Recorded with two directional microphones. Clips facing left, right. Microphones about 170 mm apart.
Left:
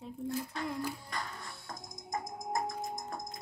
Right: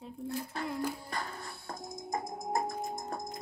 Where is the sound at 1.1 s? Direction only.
30° right (ahead or behind).